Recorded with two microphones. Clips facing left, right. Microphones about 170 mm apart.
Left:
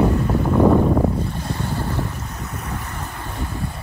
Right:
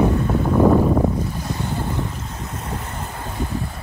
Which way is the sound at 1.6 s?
20° right (ahead or behind).